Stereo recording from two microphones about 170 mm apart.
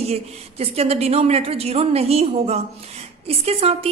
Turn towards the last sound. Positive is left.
turn(degrees=-35)  # may be behind; listen again after turning